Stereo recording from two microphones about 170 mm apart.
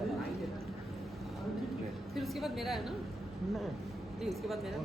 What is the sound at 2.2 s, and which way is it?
Speech, centre (ahead or behind).